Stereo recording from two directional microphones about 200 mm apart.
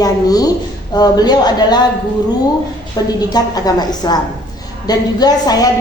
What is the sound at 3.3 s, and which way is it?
A woman's voice, 20° left (ahead or behind).